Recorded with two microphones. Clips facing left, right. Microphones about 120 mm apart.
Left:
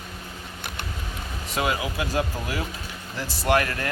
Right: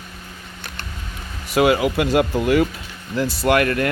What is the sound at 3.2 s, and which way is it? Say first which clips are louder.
Speech: right 5 dB; 60° right (ahead or behind).